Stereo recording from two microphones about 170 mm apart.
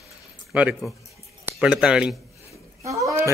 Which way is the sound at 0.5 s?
10° right (ahead or behind).